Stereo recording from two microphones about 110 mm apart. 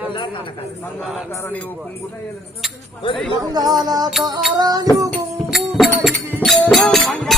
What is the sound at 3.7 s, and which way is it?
A man's voice, 35° right (ahead or behind).